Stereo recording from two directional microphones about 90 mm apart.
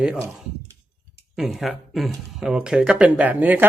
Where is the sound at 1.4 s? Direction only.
5° right (ahead or behind).